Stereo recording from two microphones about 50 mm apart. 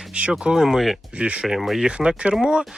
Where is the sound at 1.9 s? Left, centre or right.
Right.